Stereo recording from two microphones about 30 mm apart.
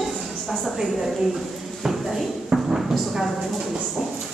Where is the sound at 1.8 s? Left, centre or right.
Centre.